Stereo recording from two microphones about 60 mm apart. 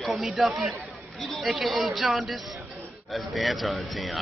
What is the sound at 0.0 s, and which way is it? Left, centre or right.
Speech, centre.